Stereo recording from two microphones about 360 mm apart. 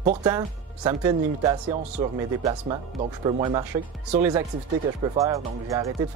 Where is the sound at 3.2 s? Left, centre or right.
Centre.